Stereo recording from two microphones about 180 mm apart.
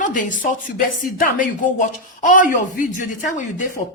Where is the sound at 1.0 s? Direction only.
50° left (ahead or behind).